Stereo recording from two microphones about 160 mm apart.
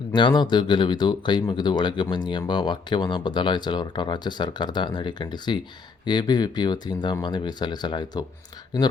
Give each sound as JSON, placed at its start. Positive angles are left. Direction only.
{"t": 0.1, "sound": "speech", "side_deg": 30}